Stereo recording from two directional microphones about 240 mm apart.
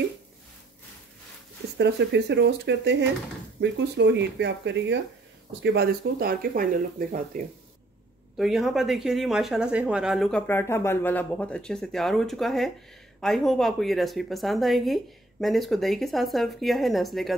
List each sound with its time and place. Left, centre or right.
1.8 s speech: right
8.4 s speech: centre